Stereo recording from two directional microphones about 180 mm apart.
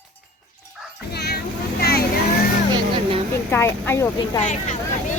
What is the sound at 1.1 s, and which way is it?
Vehicle, 65° left (ahead or behind).